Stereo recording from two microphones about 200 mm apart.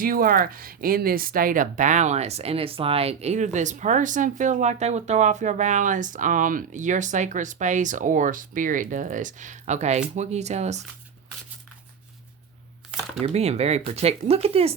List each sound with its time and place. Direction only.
0.0 s speech: 45° right (ahead or behind)
13.2 s speech: 30° right (ahead or behind)